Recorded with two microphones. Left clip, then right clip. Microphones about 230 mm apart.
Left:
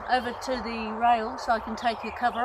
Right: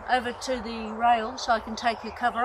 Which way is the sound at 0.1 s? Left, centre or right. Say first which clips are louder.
Even; centre.